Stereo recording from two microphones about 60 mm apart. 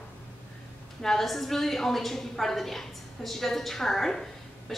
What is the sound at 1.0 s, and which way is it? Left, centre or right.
A woman's voice, centre.